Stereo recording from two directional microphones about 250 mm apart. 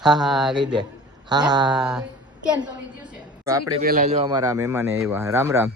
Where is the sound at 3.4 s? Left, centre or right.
Centre.